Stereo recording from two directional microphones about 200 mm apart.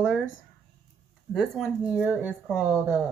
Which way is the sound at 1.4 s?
5° right (ahead or behind).